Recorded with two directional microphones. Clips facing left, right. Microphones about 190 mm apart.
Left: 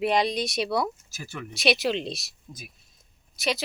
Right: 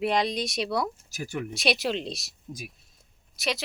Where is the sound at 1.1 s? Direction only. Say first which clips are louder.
Right 6 dB; 15° right (ahead or behind).